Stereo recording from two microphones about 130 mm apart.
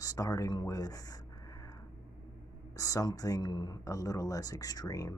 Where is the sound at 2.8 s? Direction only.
25° left (ahead or behind).